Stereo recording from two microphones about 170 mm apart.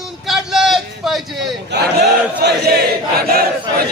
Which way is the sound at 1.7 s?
80° right.